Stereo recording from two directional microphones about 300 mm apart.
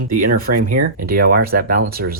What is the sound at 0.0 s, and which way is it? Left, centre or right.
Speech, right.